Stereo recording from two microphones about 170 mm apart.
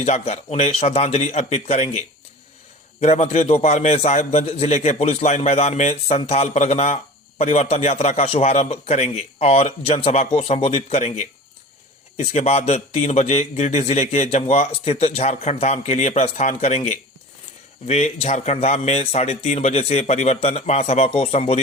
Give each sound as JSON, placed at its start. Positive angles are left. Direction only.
{"t": 0.0, "sound": "a man's voice", "side_deg": 40}